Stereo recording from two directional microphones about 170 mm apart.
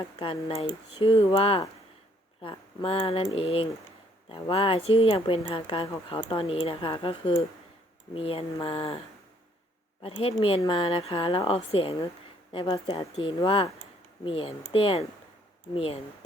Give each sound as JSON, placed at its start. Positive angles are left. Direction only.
{"t": 0.2, "sound": "speech", "side_deg": 30}
{"t": 10.0, "sound": "speech", "side_deg": 35}